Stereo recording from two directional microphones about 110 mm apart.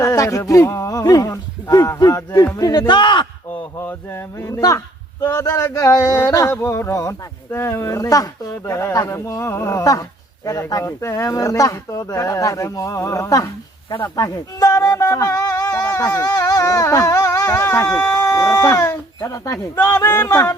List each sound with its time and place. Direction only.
0.0 s speech: 30° left (ahead or behind); by 3.6 s 45° left (ahead or behind)
3.8 s a man's voice: 25° left (ahead or behind)